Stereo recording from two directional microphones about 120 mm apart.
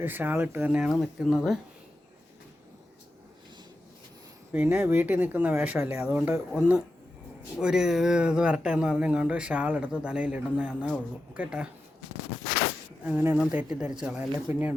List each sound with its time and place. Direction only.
0.0 s speech: 15° right (ahead or behind); by 1.5 s centre (ahead or behind)
4.5 s speech: 10° right (ahead or behind)
7.6 s speech: 5° right (ahead or behind)
13.1 s speech: 15° right (ahead or behind)
14.5 s speech: 20° right (ahead or behind)